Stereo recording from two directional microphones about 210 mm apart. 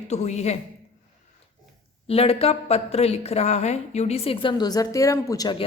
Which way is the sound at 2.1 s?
30° left (ahead or behind).